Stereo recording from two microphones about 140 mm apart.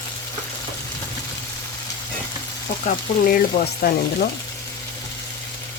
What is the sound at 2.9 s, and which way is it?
Speech, 90° left.